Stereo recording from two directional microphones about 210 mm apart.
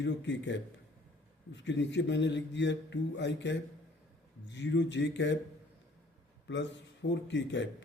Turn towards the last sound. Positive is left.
turn(degrees=60)  # may be behind; listen again after turning